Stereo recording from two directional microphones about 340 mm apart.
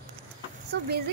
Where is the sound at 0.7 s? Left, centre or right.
Right.